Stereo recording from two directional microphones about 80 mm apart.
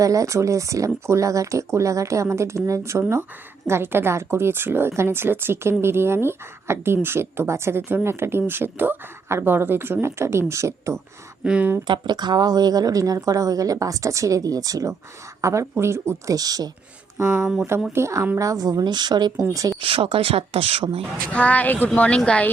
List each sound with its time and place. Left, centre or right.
0.0 s a woman's voice: right
11.4 s speech: centre
11.9 s a woman's voice: right
16.3 s speech: right
17.2 s a woman's voice: right
18.3 s a woman's voice: right
19.8 s speech: right
21.3 s speech: centre